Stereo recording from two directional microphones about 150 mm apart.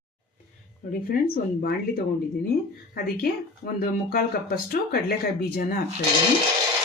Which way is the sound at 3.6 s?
60° left (ahead or behind).